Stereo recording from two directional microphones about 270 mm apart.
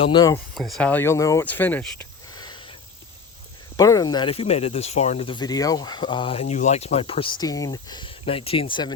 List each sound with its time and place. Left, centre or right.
0.0 s speech: centre
0.5 s speech: centre
3.8 s speech: centre